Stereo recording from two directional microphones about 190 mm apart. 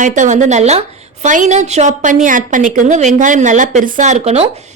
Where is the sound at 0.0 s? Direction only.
40° right (ahead or behind).